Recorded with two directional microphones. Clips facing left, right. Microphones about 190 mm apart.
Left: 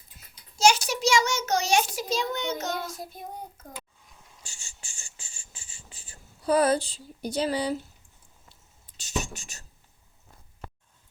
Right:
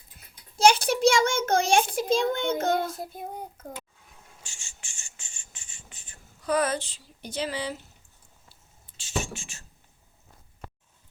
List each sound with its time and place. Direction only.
0.5 s a child's voice: 55° right (ahead or behind)
4.4 s cricket: 35° left (ahead or behind)
9.0 s speech: 40° left (ahead or behind)